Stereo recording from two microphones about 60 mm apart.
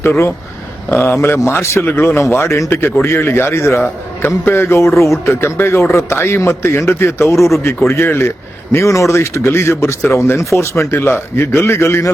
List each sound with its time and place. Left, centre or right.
0.0 s a man's voice: left
7.3 s a man's voice: centre
7.6 s a man's voice: left
8.7 s a man's voice: left